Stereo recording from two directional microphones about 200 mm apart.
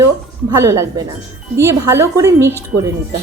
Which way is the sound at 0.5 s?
15° right (ahead or behind).